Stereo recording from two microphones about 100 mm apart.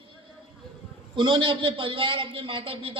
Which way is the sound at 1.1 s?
50° right (ahead or behind).